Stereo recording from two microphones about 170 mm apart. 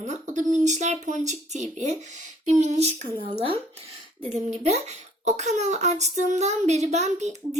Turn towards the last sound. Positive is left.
turn(degrees=-40)  # may be behind; listen again after turning